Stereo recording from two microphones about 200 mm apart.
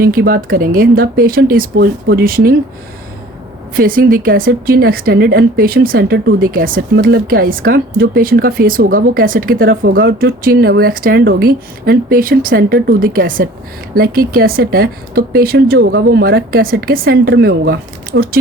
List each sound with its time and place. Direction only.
0.0 s speech: 50° right (ahead or behind)
3.8 s speech: 45° right (ahead or behind)